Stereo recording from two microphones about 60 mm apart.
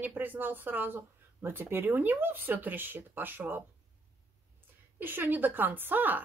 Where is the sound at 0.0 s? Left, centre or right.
Right.